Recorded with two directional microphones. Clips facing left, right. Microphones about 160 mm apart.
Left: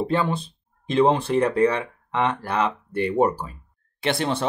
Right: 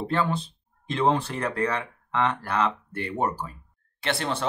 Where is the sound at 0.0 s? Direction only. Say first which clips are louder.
Left 3 dB; 15° left (ahead or behind).